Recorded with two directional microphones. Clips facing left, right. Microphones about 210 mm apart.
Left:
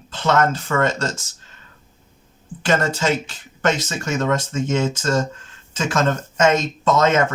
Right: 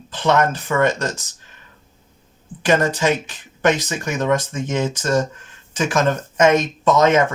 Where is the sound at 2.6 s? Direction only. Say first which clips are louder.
Right 2 dB; 15° right (ahead or behind).